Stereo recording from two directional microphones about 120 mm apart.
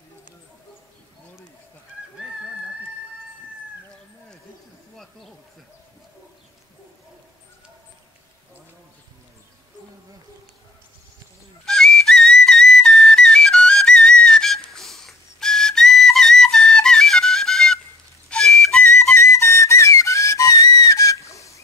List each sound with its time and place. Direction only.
11.6 s whistle: 5° left (ahead or behind)
19.0 s whistle: 25° left (ahead or behind)